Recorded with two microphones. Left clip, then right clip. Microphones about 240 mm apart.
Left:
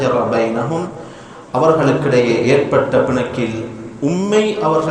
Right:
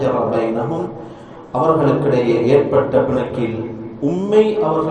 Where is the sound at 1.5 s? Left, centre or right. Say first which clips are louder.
Left 2 dB; left.